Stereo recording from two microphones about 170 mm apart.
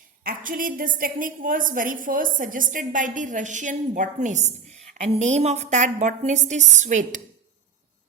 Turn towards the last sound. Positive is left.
turn(degrees=-45)  # may be behind; listen again after turning